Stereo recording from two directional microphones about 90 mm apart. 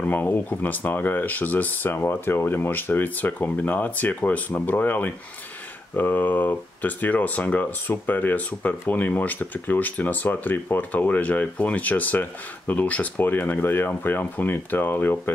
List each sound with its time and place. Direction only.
0.0 s speech: 20° left (ahead or behind)